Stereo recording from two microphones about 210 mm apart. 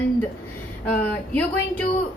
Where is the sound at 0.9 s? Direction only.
5° left (ahead or behind).